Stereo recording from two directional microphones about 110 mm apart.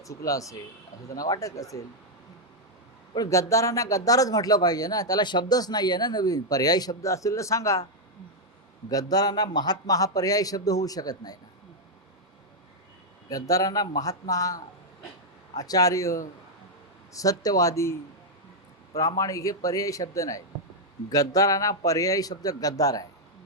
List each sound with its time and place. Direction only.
0.0 s speech: 30° left (ahead or behind)
3.2 s speech: 30° left (ahead or behind)
8.9 s speech: 35° left (ahead or behind)
13.3 s speech: 35° left (ahead or behind)